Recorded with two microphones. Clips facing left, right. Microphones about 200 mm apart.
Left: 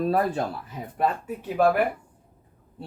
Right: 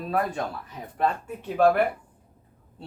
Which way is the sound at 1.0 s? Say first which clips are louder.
Left 1 dB; 5° left (ahead or behind).